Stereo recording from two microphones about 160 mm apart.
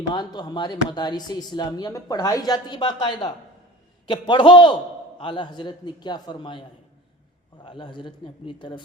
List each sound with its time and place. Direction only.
0.1 s speech: 25° left (ahead or behind)
7.6 s speech: 30° left (ahead or behind)